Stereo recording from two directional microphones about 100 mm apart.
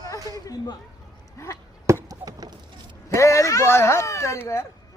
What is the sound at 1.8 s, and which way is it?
Chop, 35° right (ahead or behind).